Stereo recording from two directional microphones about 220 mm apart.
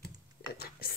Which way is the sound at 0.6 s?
45° left (ahead or behind).